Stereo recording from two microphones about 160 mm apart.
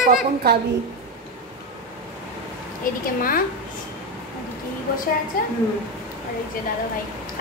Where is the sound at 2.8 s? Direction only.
65° left (ahead or behind).